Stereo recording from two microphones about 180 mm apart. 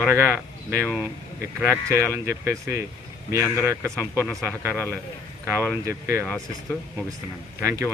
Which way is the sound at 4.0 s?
10° left (ahead or behind).